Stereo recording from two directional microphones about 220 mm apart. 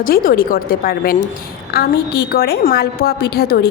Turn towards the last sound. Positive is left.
turn(degrees=45)  # may be behind; listen again after turning